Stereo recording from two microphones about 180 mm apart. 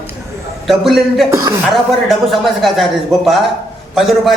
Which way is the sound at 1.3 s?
20° right (ahead or behind).